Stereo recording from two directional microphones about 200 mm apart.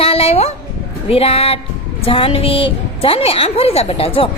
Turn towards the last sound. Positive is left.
turn(degrees=30)  # may be behind; listen again after turning